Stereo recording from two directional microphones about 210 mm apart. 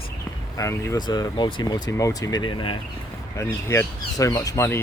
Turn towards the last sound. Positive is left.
turn(degrees=15)  # may be behind; listen again after turning